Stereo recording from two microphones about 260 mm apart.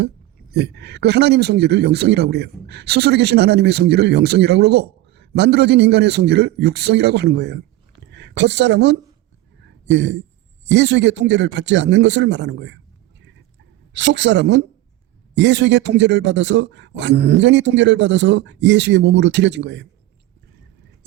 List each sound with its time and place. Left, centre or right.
0.5 s a woman's voice: right
9.6 s a sound: right
10.7 s speech: right
13.9 s speech: right